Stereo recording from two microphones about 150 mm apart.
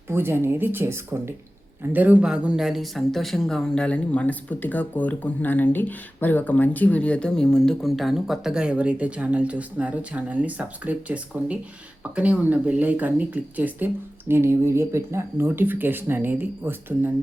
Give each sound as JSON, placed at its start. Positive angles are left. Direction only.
{"t": 0.1, "sound": "speech", "side_deg": -15}